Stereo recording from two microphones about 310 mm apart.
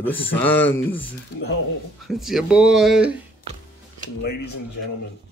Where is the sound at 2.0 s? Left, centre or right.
Centre.